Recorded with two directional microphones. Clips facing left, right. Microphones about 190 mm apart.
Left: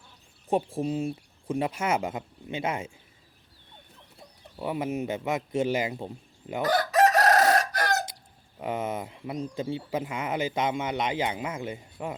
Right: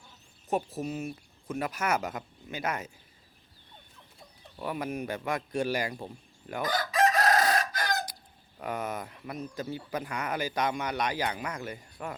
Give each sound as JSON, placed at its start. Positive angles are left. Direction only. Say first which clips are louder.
{"t": 0.5, "sound": "speech", "louder": "left 4 dB", "side_deg": 30}
{"t": 4.5, "sound": "speech", "louder": "left 4 dB", "side_deg": 20}
{"t": 6.6, "sound": "chicken", "louder": "left 5 dB", "side_deg": 70}
{"t": 8.5, "sound": "speech", "louder": "left 4 dB", "side_deg": 25}